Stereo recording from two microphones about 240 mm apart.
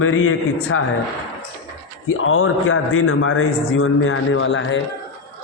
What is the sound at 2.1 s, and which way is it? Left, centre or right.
A man's voice, left.